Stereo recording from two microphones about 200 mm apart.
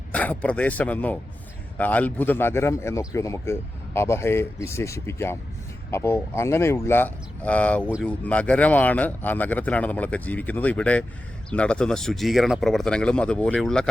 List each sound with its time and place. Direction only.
0.1 s speech: 5° left (ahead or behind)